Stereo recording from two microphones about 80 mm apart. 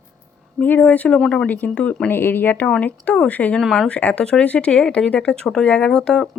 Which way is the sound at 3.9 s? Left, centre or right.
Centre.